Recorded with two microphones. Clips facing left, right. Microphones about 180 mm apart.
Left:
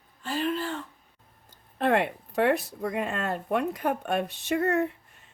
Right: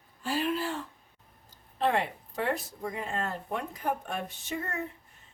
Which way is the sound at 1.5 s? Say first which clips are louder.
Left 4 dB; 60° left (ahead or behind).